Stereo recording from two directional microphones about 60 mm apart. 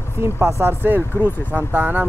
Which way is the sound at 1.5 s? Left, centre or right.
Right.